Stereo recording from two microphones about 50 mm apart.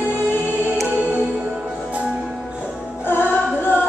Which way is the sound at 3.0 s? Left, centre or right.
Left.